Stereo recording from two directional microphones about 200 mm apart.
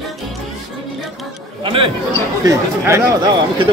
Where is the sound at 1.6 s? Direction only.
25° right (ahead or behind).